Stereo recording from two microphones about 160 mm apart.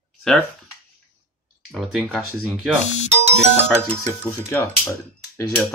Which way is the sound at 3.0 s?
45° right (ahead or behind).